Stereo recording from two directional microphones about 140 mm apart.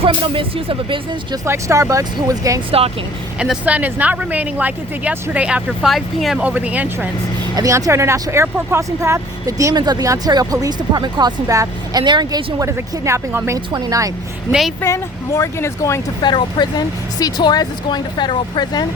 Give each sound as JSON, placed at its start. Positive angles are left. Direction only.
{"t": 0.0, "sound": "speech", "side_deg": -40}
{"t": 1.5, "sound": "speech", "side_deg": -20}
{"t": 3.3, "sound": "speech", "side_deg": -5}
{"t": 7.5, "sound": "speech", "side_deg": -25}
{"t": 14.8, "sound": "speech", "side_deg": 20}
{"t": 16.2, "sound": "speech", "side_deg": 30}